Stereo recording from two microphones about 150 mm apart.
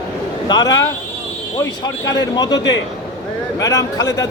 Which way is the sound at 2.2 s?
25° left (ahead or behind).